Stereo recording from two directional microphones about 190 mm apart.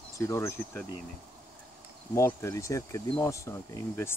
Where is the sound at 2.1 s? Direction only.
15° left (ahead or behind).